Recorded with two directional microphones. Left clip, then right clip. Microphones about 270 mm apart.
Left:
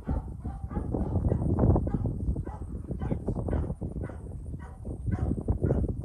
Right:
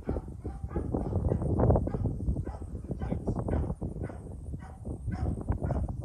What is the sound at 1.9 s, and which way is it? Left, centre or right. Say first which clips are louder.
Fowl: left 1 dB; centre.